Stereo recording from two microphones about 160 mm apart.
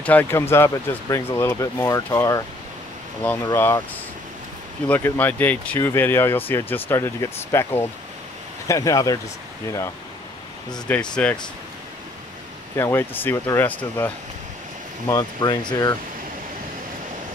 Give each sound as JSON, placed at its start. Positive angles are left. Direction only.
{"t": 0.0, "sound": "speech", "side_deg": 10}
{"t": 3.4, "sound": "speech", "side_deg": 20}
{"t": 4.8, "sound": "speech", "side_deg": 10}
{"t": 10.9, "sound": "speech", "side_deg": 5}
{"t": 12.7, "sound": "speech", "side_deg": 15}
{"t": 15.0, "sound": "speech", "side_deg": 25}